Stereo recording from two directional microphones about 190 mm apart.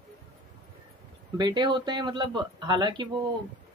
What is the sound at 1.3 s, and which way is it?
Speech, 20° right (ahead or behind).